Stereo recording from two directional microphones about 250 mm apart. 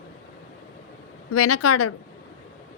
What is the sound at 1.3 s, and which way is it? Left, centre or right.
Speech, left.